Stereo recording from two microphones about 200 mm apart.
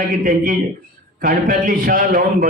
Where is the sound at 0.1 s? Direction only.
45° right (ahead or behind).